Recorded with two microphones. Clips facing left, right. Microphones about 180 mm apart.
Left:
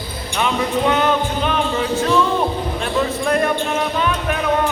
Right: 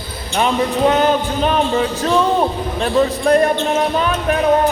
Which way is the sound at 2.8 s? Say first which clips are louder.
Right 6 dB; 35° right (ahead or behind).